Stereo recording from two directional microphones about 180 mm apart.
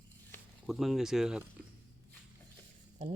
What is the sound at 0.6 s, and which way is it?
Speech, centre (ahead or behind).